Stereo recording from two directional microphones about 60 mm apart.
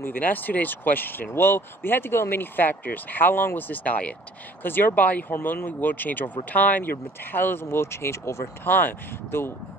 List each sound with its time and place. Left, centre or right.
0.0 s speech: left
8.6 s speech: left